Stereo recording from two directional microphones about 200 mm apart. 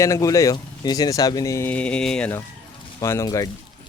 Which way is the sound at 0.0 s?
15° left (ahead or behind).